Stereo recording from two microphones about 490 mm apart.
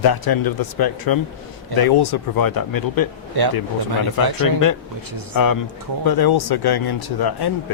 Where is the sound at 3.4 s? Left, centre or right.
Right.